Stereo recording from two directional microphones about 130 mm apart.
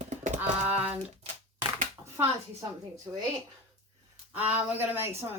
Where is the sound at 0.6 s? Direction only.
10° right (ahead or behind).